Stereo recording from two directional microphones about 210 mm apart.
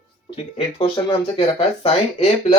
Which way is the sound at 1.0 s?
25° left (ahead or behind).